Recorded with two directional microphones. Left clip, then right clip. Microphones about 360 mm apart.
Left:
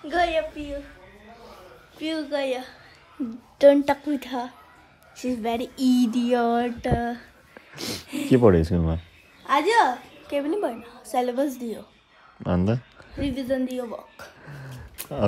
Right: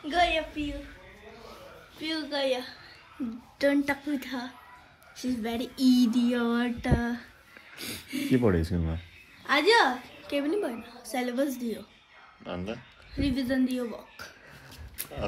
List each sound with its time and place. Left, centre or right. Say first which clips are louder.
0.0 s a sound: left 3 dB; left
2.0 s a woman's voice: left 4 dB; centre
7.8 s a woman's voice: left 4 dB; centre
9.5 s a woman's voice: left 3 dB; centre
12.4 s speech: left 10 dB; left
13.2 s a woman's voice: left 2 dB; centre